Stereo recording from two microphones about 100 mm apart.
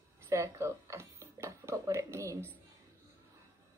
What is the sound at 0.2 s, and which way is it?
Speech, 30° right (ahead or behind).